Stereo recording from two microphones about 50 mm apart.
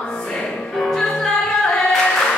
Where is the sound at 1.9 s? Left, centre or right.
Centre.